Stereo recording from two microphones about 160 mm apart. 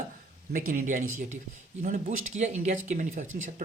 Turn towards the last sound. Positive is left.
turn(degrees=-50)  # may be behind; listen again after turning